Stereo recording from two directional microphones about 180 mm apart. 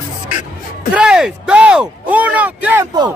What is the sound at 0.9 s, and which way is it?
Speech, 5° right (ahead or behind).